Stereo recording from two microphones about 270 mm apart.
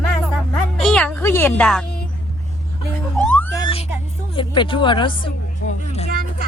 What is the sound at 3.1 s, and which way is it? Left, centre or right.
Music, centre.